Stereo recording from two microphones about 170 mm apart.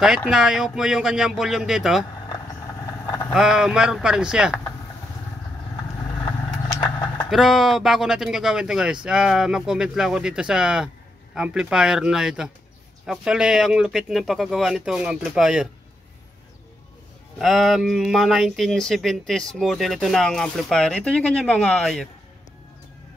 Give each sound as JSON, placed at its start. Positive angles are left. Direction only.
{"t": 0.0, "sound": "speech", "side_deg": -5}
{"t": 3.1, "sound": "vehicle", "side_deg": 15}
{"t": 3.3, "sound": "speech", "side_deg": -5}
{"t": 6.7, "sound": "vehicle", "side_deg": 20}
{"t": 7.2, "sound": "speech", "side_deg": 0}
{"t": 17.4, "sound": "speech", "side_deg": 0}